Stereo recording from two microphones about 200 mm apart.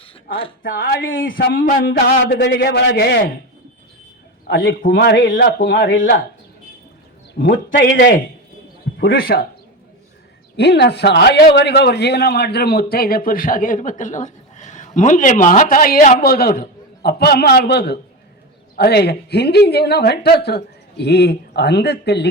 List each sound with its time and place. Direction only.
1.4 s a man's voice: 50° left (ahead or behind)
4.4 s a man's voice: 50° left (ahead or behind)
4.9 s speech: 65° left (ahead or behind)
5.3 s a man's voice: 45° left (ahead or behind)
7.7 s a man's voice: 60° left (ahead or behind)
9.0 s a man's voice: 50° left (ahead or behind)
10.6 s a man's voice: 55° left (ahead or behind)